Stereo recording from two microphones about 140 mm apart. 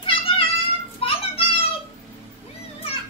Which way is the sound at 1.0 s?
40° left (ahead or behind).